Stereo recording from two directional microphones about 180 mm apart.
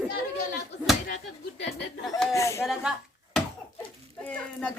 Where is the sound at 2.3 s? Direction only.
15° left (ahead or behind).